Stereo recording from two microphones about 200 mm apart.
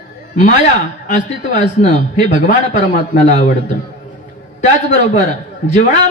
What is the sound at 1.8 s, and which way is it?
Speech, 40° left (ahead or behind).